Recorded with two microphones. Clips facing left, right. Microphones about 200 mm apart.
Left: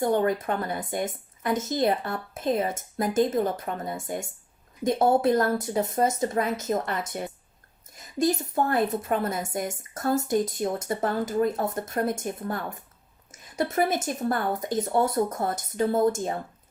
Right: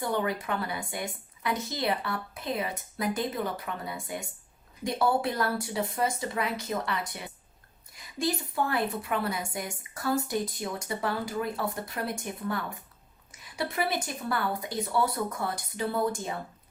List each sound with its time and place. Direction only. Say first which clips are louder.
0.0 s a woman's voice: left 6 dB; 50° left (ahead or behind)